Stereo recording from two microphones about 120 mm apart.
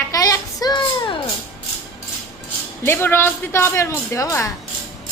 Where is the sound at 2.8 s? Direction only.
20° left (ahead or behind).